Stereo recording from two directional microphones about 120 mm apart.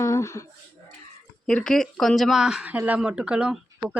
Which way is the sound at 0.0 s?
25° left (ahead or behind).